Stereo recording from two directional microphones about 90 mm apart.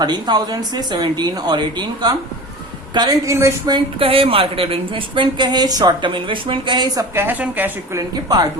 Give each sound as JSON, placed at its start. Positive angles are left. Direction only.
{"t": 0.0, "sound": "a woman's voice", "side_deg": -50}
{"t": 3.2, "sound": "a woman's voice", "side_deg": -30}
{"t": 4.0, "sound": "a woman's voice", "side_deg": -90}
{"t": 6.0, "sound": "speech", "side_deg": -65}
{"t": 7.2, "sound": "a woman's voice", "side_deg": -20}
{"t": 7.9, "sound": "speech", "side_deg": -50}